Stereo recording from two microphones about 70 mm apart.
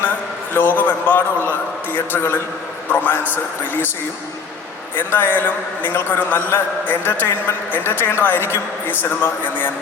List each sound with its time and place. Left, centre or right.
0.5 s a man's voice: left
4.9 s a man's voice: left